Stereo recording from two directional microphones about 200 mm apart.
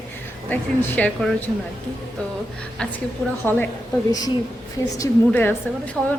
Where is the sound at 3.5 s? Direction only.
10° left (ahead or behind).